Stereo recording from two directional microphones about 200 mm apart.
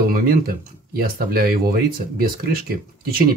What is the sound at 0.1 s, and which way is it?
Speech, 50° right (ahead or behind).